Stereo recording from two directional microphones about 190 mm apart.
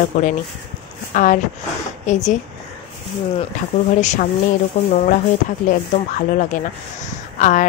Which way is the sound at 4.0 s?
35° left (ahead or behind).